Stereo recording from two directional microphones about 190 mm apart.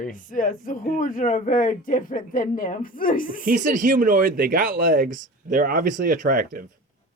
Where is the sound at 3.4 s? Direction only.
45° right (ahead or behind).